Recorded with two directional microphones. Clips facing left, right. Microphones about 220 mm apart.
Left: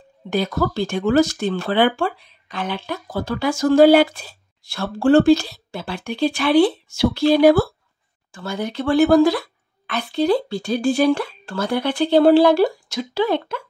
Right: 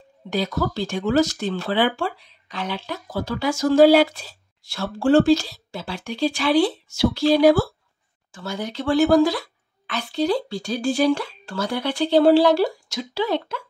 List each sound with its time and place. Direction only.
0.3 s speech: 55° left (ahead or behind)